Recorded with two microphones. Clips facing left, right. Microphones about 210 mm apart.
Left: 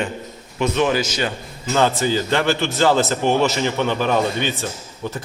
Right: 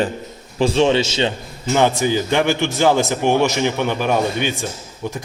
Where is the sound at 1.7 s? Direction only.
15° right (ahead or behind).